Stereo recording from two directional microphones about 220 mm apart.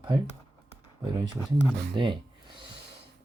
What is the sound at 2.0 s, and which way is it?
Speech, 20° right (ahead or behind).